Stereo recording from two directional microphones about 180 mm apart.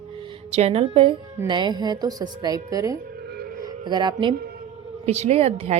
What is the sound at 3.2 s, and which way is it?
Music, 60° right (ahead or behind).